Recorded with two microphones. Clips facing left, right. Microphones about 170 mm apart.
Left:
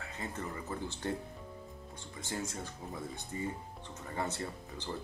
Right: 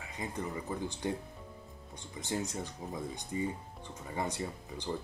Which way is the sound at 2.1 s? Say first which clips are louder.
Right 4 dB; 20° right (ahead or behind).